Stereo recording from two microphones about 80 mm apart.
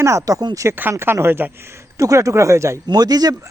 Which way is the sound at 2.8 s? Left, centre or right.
Right.